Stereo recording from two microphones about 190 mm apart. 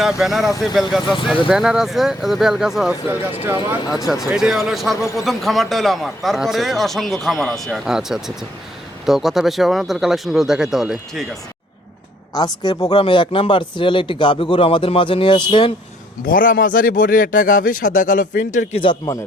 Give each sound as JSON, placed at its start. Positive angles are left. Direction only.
{"t": 0.2, "sound": "speech", "side_deg": 0}
{"t": 12.3, "sound": "speech", "side_deg": 20}
{"t": 16.2, "sound": "speech", "side_deg": 45}
{"t": 18.7, "sound": "speech", "side_deg": 25}